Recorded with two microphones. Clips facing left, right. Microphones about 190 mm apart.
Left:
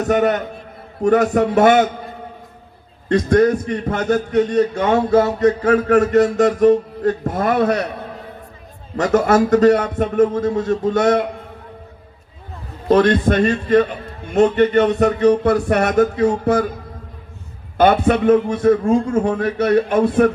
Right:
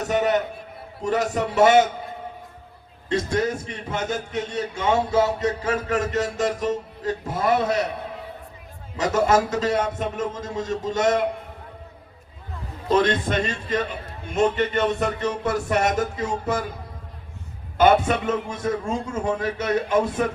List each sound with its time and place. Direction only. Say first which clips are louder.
0.1 s a man's voice: left 4 dB; 60° left (ahead or behind)
3.1 s a man's voice: left 9 dB; 60° left (ahead or behind)
9.1 s a man's voice: left 7 dB; 65° left (ahead or behind)
12.9 s a man's voice: left 7 dB; 55° left (ahead or behind)
17.7 s a man's voice: left 4 dB; 60° left (ahead or behind)